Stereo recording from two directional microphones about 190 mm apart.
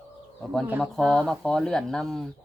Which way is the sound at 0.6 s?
10° right (ahead or behind).